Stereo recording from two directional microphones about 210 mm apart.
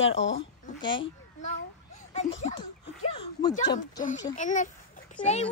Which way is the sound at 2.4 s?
25° left (ahead or behind).